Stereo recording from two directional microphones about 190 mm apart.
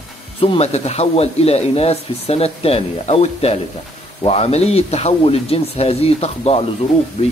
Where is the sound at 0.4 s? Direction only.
30° left (ahead or behind).